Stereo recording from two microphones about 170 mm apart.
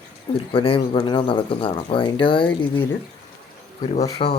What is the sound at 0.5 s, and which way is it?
Speech, 30° left (ahead or behind).